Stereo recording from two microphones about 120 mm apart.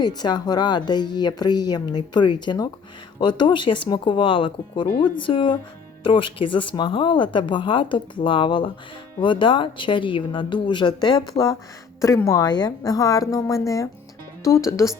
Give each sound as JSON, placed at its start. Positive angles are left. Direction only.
{"t": 0.0, "sound": "a woman's voice", "side_deg": 35}
{"t": 11.9, "sound": "a woman's voice", "side_deg": 25}